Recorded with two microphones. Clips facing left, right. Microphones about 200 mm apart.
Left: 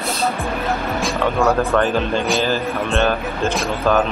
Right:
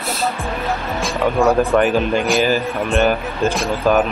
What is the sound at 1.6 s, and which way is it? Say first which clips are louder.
Speech: right 3 dB; 15° right (ahead or behind).